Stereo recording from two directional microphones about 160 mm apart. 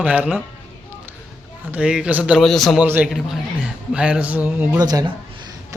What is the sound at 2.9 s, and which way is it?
Speech, 10° right (ahead or behind).